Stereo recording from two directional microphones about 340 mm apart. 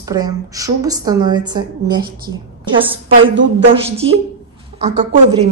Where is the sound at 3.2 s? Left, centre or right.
Right.